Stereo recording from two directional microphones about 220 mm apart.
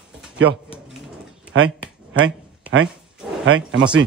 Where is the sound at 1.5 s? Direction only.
60° right (ahead or behind).